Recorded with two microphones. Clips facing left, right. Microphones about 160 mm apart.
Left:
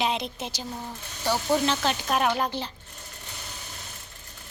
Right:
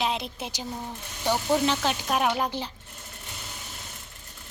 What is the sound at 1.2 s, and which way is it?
Speech, 15° right (ahead or behind).